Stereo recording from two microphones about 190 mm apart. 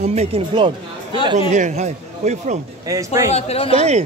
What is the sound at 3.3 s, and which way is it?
Speech, 35° left (ahead or behind).